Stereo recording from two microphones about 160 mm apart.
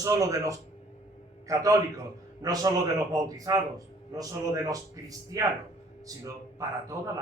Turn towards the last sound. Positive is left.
turn(degrees=-20)  # may be behind; listen again after turning